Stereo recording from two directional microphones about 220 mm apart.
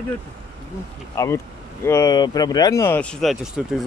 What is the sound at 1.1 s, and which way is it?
Speech, 15° left (ahead or behind).